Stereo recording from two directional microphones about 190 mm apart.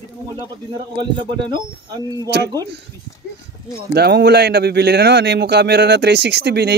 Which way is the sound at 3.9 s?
60° right (ahead or behind).